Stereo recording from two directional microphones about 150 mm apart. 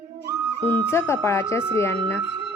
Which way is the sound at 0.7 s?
15° left (ahead or behind).